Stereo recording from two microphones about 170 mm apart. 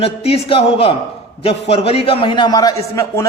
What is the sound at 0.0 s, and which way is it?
A man's voice, 35° left (ahead or behind).